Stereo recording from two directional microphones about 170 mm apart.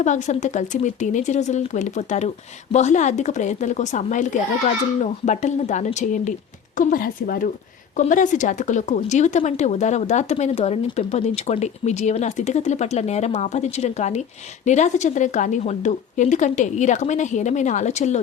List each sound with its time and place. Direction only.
0.0 s speech: 45° left (ahead or behind)
6.7 s a woman's voice: 55° left (ahead or behind)